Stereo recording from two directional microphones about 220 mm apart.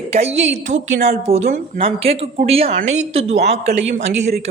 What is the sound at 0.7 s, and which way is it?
A woman's voice, 30° right (ahead or behind).